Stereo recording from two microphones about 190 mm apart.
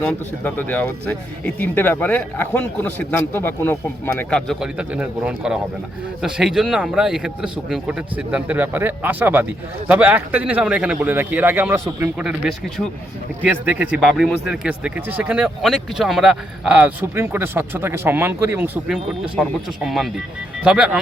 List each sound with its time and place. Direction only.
0.1 s speech: 10° left (ahead or behind)